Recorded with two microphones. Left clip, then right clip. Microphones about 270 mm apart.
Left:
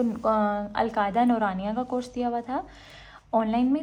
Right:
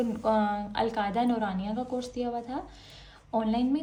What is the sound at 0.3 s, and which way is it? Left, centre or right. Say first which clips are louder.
A woman's voice: left 2 dB; centre.